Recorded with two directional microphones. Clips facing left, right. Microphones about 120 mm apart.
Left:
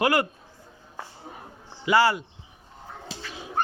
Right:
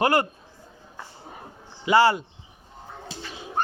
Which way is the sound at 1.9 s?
25° right (ahead or behind).